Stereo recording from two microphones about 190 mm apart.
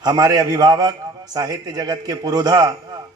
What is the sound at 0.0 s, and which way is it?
A man's voice, 20° right (ahead or behind).